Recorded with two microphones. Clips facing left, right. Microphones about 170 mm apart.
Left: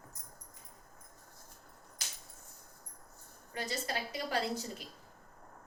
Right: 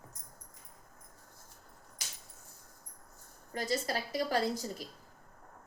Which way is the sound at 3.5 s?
40° right (ahead or behind).